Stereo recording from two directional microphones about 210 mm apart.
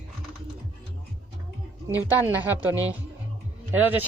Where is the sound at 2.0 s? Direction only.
10° right (ahead or behind).